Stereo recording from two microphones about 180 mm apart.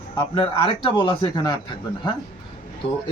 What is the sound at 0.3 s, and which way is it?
Speech, 30° left (ahead or behind).